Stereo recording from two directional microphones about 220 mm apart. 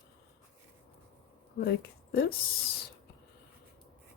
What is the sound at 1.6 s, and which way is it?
Speech, 45° left (ahead or behind).